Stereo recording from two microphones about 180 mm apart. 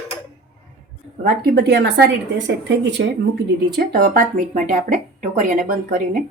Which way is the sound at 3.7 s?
55° right (ahead or behind).